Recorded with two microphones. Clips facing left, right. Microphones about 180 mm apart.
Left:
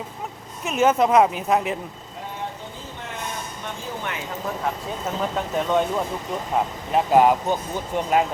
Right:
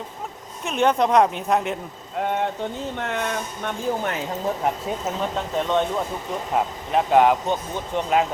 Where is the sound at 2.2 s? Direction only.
70° right (ahead or behind).